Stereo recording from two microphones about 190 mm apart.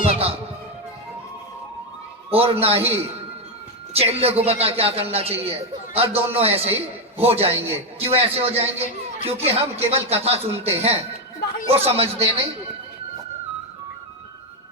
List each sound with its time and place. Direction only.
0.0 s music: 30° right (ahead or behind)
2.3 s a man's voice: 30° right (ahead or behind)